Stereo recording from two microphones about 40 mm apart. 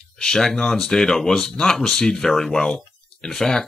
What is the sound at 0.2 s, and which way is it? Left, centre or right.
Speech, centre.